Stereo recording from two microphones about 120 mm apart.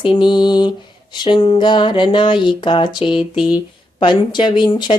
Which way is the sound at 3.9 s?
40° left (ahead or behind).